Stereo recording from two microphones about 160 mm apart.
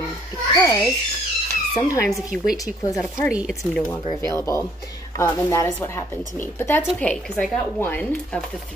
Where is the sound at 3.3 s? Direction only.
5° right (ahead or behind).